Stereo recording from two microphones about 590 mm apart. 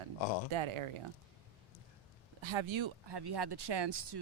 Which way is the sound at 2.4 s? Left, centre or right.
Right.